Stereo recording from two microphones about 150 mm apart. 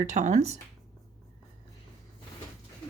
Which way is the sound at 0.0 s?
50° right (ahead or behind).